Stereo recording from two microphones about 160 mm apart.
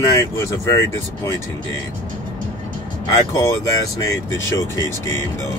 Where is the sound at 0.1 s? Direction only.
20° left (ahead or behind).